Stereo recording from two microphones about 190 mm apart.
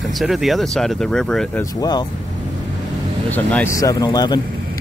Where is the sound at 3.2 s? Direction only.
10° left (ahead or behind).